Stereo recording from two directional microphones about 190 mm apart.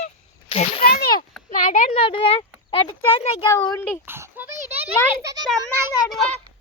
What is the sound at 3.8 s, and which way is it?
Speech, 10° left (ahead or behind).